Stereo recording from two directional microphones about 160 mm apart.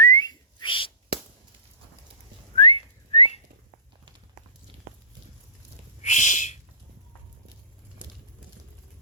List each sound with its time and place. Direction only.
0.0 s whistling: 25° left (ahead or behind)
2.6 s whistling: 35° left (ahead or behind)
6.0 s owl: 50° left (ahead or behind)